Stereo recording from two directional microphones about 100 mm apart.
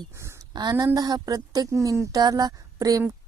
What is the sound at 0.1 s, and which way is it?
Speech, 25° right (ahead or behind).